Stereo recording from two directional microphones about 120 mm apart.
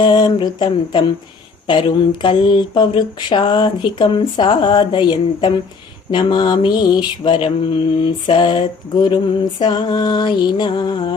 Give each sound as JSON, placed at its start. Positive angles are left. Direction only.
{"t": 0.0, "sound": "speech", "side_deg": 35}
{"t": 2.2, "sound": "speech", "side_deg": 40}